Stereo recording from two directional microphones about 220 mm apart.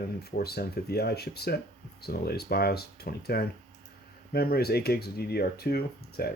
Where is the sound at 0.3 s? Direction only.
45° left (ahead or behind).